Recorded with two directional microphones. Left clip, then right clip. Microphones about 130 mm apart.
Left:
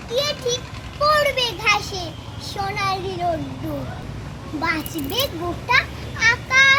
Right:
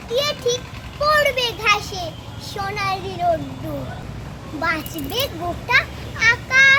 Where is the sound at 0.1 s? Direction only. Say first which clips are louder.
Right 2 dB; 15° right (ahead or behind).